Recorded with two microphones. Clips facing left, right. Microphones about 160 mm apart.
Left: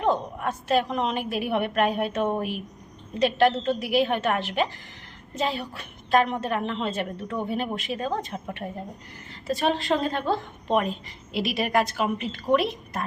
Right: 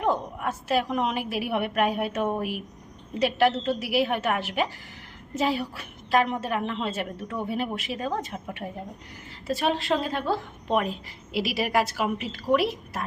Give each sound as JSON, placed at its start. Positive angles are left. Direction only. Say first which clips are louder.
{"t": 0.0, "sound": "a woman's voice", "louder": "left 1 dB", "side_deg": -5}